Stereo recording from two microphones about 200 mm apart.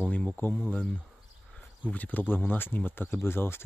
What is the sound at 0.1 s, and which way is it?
Speech, 5° left (ahead or behind).